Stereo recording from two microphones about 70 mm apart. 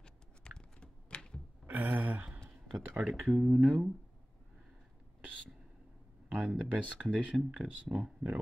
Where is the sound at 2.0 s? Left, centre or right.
Right.